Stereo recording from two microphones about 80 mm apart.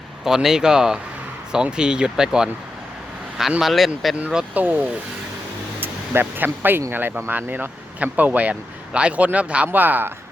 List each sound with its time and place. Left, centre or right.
0.3 s speech: centre
3.6 s speech: centre
4.5 s speech: right
5.8 s speech: right